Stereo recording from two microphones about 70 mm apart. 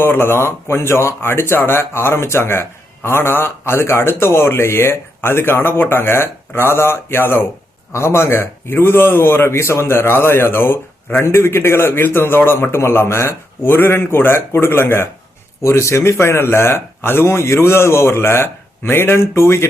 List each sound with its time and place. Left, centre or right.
0.0 s speech: left